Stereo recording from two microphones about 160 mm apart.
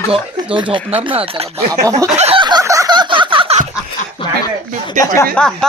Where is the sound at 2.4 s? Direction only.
25° right (ahead or behind).